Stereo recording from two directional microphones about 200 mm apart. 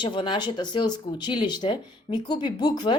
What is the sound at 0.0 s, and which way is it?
A woman's voice, 25° left (ahead or behind).